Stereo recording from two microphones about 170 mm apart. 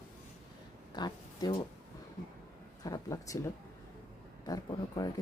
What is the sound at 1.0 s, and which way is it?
Speech, 25° left (ahead or behind).